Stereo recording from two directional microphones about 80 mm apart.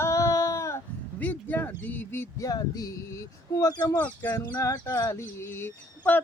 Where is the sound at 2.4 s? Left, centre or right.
Left.